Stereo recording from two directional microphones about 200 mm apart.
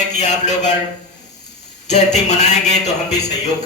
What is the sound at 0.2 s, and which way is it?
Speech, 35° left (ahead or behind).